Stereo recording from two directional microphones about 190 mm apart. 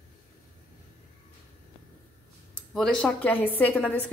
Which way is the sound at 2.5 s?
5° left (ahead or behind).